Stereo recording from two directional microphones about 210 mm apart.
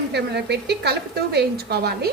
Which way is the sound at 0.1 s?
55° right (ahead or behind).